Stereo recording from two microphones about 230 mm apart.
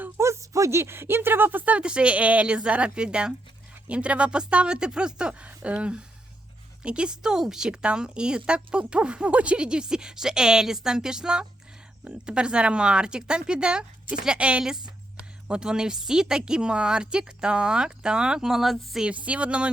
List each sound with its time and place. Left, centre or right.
0.0 s a woman's voice: centre